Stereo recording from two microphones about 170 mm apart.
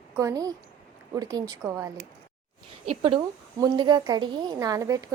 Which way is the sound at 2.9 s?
30° right (ahead or behind).